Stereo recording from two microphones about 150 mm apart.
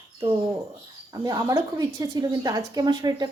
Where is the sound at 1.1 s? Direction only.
25° right (ahead or behind).